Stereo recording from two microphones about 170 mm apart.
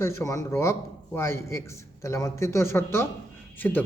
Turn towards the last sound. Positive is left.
turn(degrees=10)  # may be behind; listen again after turning